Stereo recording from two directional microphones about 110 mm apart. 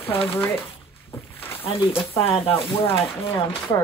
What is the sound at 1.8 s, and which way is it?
Speech, 20° left (ahead or behind).